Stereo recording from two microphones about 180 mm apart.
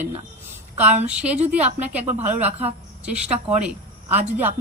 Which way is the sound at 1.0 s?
5° right (ahead or behind).